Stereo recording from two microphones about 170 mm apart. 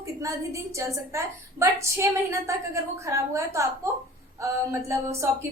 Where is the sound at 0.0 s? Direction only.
20° right (ahead or behind).